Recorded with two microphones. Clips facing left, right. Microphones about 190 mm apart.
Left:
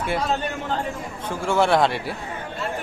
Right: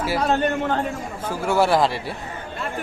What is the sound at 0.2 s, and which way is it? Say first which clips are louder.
Speech: right 5 dB; 60° right (ahead or behind).